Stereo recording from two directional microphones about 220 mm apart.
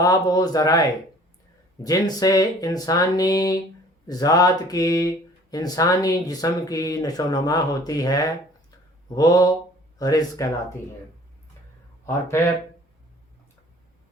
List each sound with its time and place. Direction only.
0.0 s speech: 15° left (ahead or behind)